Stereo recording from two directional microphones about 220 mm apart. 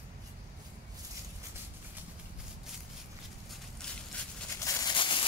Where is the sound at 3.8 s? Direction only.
5° left (ahead or behind).